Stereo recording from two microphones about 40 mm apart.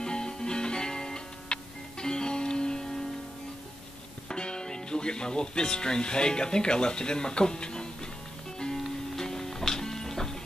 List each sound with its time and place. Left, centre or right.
0.0 s music: centre
4.3 s speech: centre
8.7 s music: centre